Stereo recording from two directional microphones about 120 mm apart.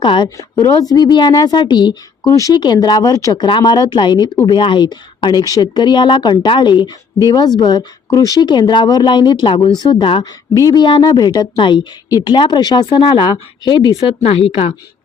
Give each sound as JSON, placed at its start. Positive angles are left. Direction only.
{"t": 0.0, "sound": "speech", "side_deg": 45}
{"t": 0.3, "sound": "speech", "side_deg": 30}
{"t": 10.5, "sound": "speech", "side_deg": 30}
{"t": 14.2, "sound": "a woman's voice", "side_deg": 55}